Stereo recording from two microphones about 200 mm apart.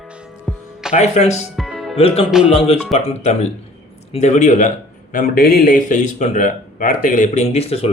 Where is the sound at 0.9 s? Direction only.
35° left (ahead or behind).